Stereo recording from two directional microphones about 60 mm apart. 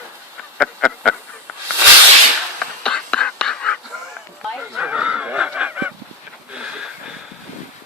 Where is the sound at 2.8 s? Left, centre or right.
Centre.